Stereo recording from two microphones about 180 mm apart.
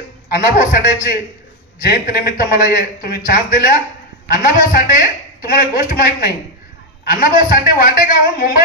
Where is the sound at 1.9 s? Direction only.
55° left (ahead or behind).